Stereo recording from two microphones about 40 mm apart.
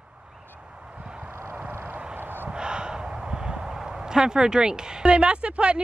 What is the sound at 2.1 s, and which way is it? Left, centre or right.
Gasp, right.